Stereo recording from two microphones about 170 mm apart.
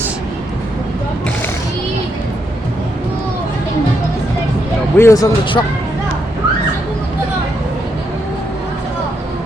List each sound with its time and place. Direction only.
4.9 s speech: 15° left (ahead or behind)